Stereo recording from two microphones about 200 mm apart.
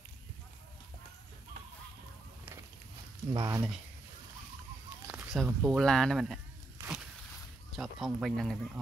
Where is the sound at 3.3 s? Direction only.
15° right (ahead or behind).